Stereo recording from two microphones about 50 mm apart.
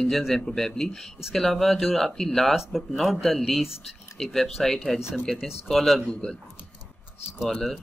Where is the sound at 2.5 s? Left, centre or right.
Centre.